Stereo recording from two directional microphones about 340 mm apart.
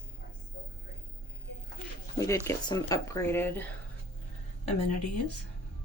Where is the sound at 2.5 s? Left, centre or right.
Centre.